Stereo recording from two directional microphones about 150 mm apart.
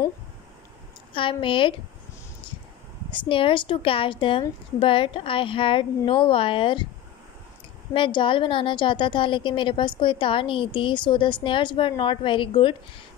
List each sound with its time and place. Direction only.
1.1 s a woman's voice: 35° left (ahead or behind)
3.1 s a woman's voice: 35° left (ahead or behind)
7.9 s a woman's voice: 35° left (ahead or behind)